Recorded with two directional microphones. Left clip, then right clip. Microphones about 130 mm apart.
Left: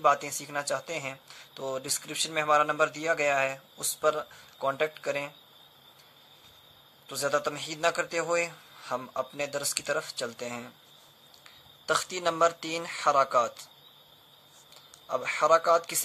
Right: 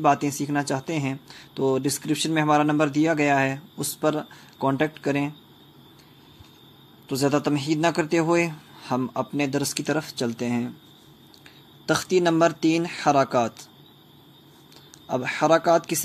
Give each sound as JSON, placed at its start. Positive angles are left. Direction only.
{"t": 0.0, "sound": "speech", "side_deg": -20}
{"t": 7.1, "sound": "speech", "side_deg": -25}
{"t": 11.9, "sound": "speech", "side_deg": -20}
{"t": 15.0, "sound": "speech", "side_deg": -20}